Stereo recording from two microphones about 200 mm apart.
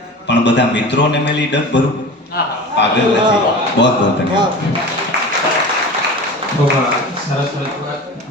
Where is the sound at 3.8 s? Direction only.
60° left (ahead or behind).